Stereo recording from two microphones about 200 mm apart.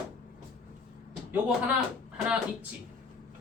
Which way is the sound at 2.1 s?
5° right (ahead or behind).